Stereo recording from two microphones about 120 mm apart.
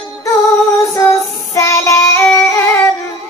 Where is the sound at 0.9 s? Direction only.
25° left (ahead or behind).